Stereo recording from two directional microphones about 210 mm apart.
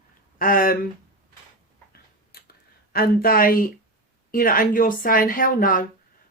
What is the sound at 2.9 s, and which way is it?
Speech, 45° left (ahead or behind).